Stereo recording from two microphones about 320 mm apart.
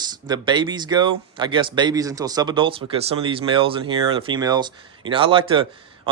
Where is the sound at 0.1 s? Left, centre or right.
Centre.